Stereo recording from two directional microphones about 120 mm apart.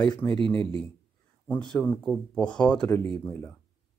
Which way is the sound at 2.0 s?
5° left (ahead or behind).